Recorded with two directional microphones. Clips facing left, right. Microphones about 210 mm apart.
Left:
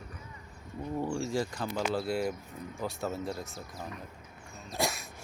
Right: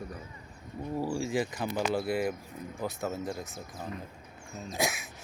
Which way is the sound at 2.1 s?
Centre (ahead or behind).